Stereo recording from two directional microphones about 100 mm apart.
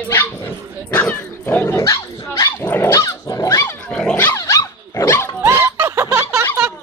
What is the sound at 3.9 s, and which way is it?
Dog, 10° left (ahead or behind).